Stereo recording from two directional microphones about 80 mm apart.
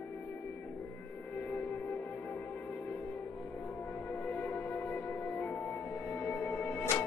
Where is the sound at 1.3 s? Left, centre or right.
Left.